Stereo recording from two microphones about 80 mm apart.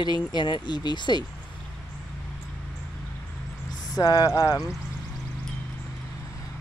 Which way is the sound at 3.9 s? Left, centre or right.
Left.